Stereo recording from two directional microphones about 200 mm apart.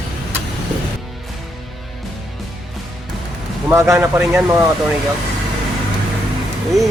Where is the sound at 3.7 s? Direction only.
10° right (ahead or behind).